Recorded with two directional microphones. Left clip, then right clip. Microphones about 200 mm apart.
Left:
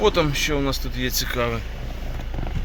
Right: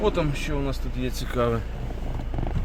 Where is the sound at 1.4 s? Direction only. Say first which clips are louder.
Right 3 dB; 25° right (ahead or behind).